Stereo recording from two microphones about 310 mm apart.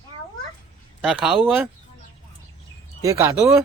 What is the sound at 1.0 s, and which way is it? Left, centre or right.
Speech, centre.